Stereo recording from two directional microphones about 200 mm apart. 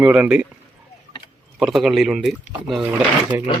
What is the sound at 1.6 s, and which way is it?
Speech, centre (ahead or behind).